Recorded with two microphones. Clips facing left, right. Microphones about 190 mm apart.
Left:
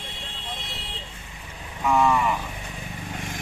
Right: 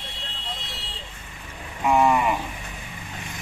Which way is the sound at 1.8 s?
15° right (ahead or behind).